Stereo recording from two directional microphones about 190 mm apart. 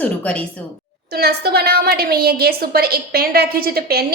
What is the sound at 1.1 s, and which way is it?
A woman's voice, 55° right (ahead or behind).